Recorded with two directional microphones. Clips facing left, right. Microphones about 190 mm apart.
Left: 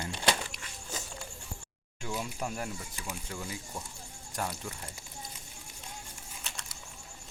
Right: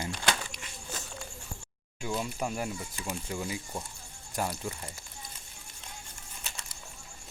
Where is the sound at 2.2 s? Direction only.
5° right (ahead or behind).